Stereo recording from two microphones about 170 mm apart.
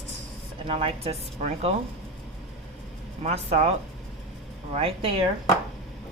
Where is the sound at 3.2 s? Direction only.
40° right (ahead or behind).